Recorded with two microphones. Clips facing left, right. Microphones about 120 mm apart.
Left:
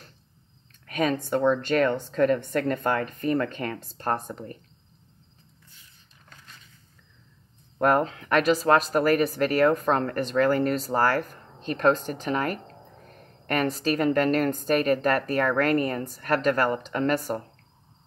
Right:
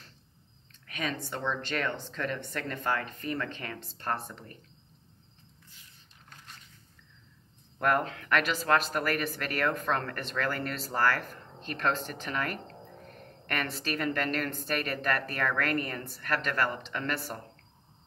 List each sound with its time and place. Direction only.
0.8 s a woman's voice: 45° left (ahead or behind)
7.8 s speech: 40° left (ahead or behind)